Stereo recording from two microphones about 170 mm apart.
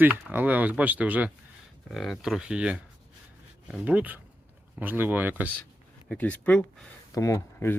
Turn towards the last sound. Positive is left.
turn(degrees=15)  # may be behind; listen again after turning